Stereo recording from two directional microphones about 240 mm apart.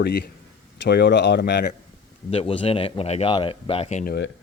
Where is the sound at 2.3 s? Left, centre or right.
Left.